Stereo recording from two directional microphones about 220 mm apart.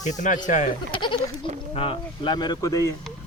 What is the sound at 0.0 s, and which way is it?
Speech, 35° left (ahead or behind).